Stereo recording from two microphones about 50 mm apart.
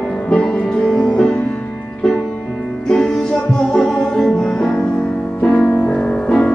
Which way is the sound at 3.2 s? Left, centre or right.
Centre.